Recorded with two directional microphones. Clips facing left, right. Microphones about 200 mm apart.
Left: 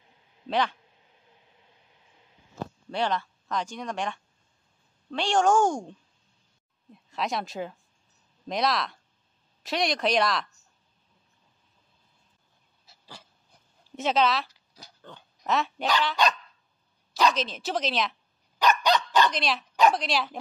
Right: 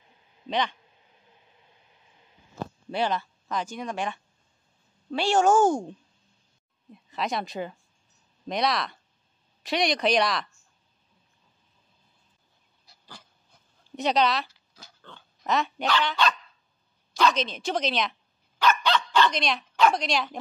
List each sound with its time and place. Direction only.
0.5 s speech: 5° left (ahead or behind)
2.9 s a woman's voice: 5° right (ahead or behind)
12.8 s dog: 5° left (ahead or behind)
13.9 s speech: centre (ahead or behind)
15.0 s pig: 15° left (ahead or behind)
15.4 s speech: centre (ahead or behind)
17.3 s speech: centre (ahead or behind)
18.8 s dog: 15° left (ahead or behind)
19.3 s speech: centre (ahead or behind)